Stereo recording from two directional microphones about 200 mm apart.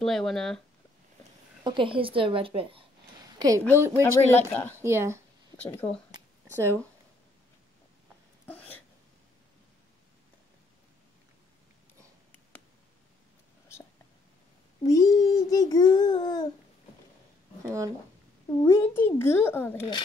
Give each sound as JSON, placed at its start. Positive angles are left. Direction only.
{"t": 0.0, "sound": "speech", "side_deg": 0}
{"t": 1.6, "sound": "a woman's voice", "side_deg": -25}
{"t": 4.5, "sound": "a child's voice", "side_deg": 10}
{"t": 4.8, "sound": "speech", "side_deg": -15}
{"t": 5.6, "sound": "a child's voice", "side_deg": 10}
{"t": 8.5, "sound": "hiccup", "side_deg": 10}
{"t": 14.8, "sound": "a child's voice", "side_deg": 15}
{"t": 17.6, "sound": "speech", "side_deg": -15}
{"t": 18.5, "sound": "a child's voice", "side_deg": 15}